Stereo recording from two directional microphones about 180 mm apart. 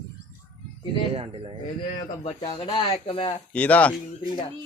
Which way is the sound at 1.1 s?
30° right (ahead or behind).